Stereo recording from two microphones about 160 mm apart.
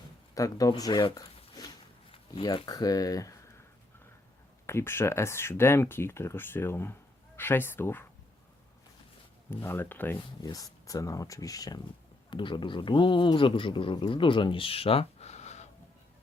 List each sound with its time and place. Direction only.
0.3 s speech: 20° left (ahead or behind)
4.6 s speech: 15° left (ahead or behind)
9.5 s speech: 15° left (ahead or behind)
10.2 s speech: 25° left (ahead or behind); by 15.7 s 45° left (ahead or behind)